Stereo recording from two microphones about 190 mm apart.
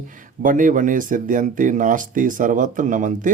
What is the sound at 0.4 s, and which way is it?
Speech, 45° right (ahead or behind).